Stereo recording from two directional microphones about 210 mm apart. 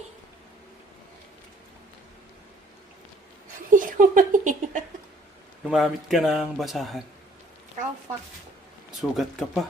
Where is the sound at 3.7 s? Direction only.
40° right (ahead or behind).